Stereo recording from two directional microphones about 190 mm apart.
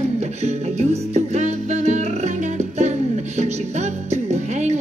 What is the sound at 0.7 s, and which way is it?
Music, 35° right (ahead or behind).